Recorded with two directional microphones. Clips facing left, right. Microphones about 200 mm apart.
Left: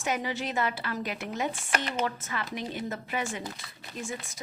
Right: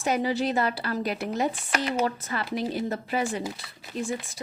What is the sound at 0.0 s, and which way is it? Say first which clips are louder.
Speech: right 6 dB; 35° right (ahead or behind).